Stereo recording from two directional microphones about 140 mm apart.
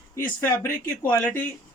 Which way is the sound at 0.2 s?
15° left (ahead or behind).